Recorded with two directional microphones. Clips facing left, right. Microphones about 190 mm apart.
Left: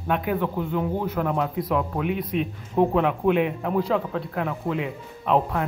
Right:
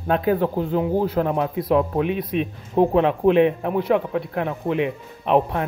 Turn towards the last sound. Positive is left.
turn(degrees=-20)  # may be behind; listen again after turning